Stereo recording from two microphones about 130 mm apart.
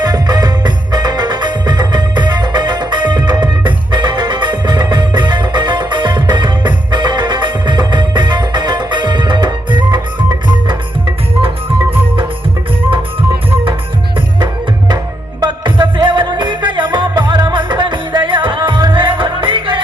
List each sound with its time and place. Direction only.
0.0 s music: 30° right (ahead or behind)
14.3 s music: 35° right (ahead or behind)